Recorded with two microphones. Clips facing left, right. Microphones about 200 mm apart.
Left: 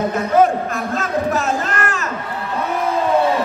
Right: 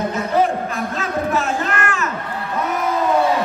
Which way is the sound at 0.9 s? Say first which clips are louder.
Left 2 dB; 40° left (ahead or behind).